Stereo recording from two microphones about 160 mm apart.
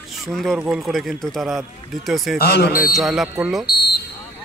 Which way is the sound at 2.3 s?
80° left.